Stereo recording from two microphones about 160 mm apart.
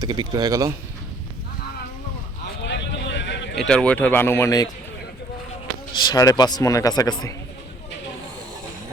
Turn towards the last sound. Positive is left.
turn(degrees=20)  # may be behind; listen again after turning